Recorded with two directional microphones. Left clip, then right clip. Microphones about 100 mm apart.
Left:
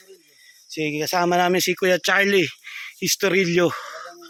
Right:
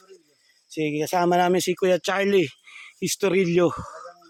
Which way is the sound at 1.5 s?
15° right (ahead or behind).